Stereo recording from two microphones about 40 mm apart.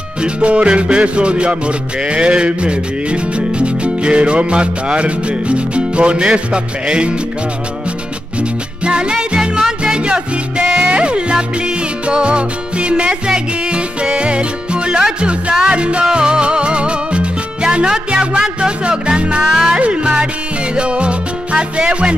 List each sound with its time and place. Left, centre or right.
0.2 s music: right
8.4 s music: right
9.9 s music: right
19.5 s music: centre
19.8 s music: right
20.7 s salsa music: right